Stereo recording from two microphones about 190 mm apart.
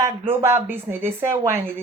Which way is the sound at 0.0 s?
15° right (ahead or behind).